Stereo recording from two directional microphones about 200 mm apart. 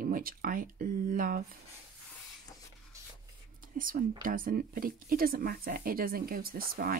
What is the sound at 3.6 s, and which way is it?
Whispering, 45° right (ahead or behind).